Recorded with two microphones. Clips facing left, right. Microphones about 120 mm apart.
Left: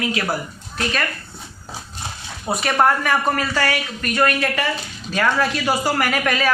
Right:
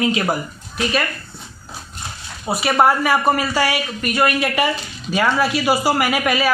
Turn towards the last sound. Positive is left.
turn(degrees=-10)  # may be behind; listen again after turning